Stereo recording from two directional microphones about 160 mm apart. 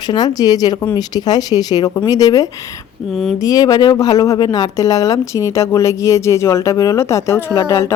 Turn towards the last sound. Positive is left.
turn(degrees=15)  # may be behind; listen again after turning